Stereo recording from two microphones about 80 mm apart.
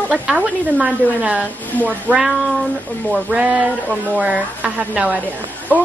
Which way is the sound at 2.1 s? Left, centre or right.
Left.